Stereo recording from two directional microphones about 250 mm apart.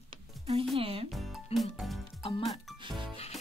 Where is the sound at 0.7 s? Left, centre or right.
Right.